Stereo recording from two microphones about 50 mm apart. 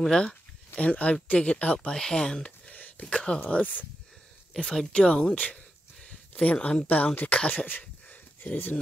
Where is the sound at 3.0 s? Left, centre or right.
Centre.